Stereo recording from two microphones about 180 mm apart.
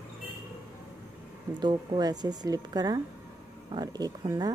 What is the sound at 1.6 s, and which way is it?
Speech, 25° right (ahead or behind).